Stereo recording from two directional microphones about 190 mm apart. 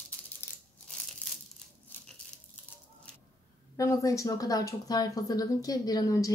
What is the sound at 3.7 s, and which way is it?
Speech, 15° left (ahead or behind).